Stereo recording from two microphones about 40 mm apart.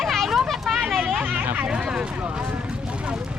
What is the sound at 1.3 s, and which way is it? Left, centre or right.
Speech, right.